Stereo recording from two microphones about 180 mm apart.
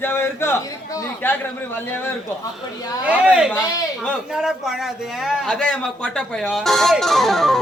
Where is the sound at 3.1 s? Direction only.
5° right (ahead or behind).